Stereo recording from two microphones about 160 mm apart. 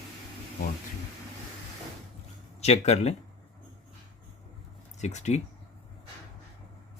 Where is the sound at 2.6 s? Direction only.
40° left (ahead or behind).